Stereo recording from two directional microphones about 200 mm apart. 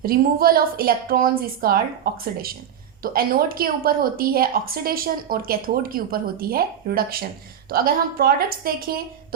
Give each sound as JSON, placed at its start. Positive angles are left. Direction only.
{"t": 0.0, "sound": "a woman's voice", "side_deg": -45}